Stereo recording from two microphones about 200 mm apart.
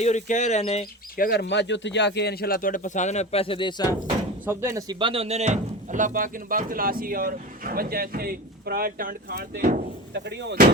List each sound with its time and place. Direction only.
0.0 s speech: 35° left (ahead or behind)
1.1 s speech: 50° left (ahead or behind); by 3.9 s 20° left (ahead or behind)
4.4 s speech: 15° right (ahead or behind); by 9.8 s 45° right (ahead or behind)
10.2 s speech: 60° right (ahead or behind)